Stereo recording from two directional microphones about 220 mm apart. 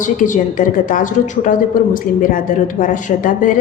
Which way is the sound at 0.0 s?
35° left (ahead or behind).